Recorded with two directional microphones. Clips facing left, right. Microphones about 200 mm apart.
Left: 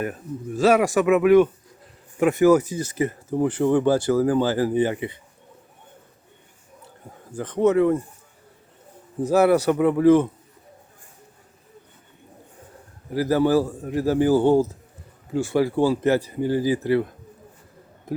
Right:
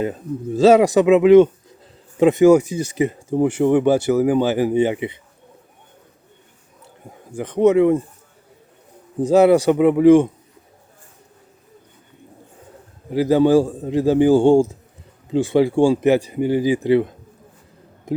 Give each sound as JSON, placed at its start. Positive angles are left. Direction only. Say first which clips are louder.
{"t": 0.0, "sound": "speech", "louder": "right 5 dB", "side_deg": -25}
{"t": 7.3, "sound": "speech", "louder": "right 4 dB", "side_deg": -10}
{"t": 9.2, "sound": "speech", "louder": "right 5 dB", "side_deg": -15}
{"t": 13.1, "sound": "a man's voice", "louder": "right 5 dB", "side_deg": -20}